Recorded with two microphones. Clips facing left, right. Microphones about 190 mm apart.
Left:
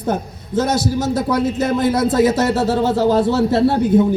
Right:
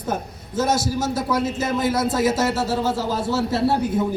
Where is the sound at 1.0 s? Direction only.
60° left (ahead or behind).